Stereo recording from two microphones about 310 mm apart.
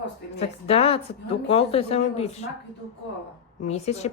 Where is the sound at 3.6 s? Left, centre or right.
Left.